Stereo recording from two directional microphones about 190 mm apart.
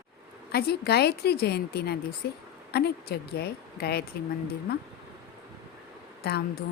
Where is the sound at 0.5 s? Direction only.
55° left (ahead or behind).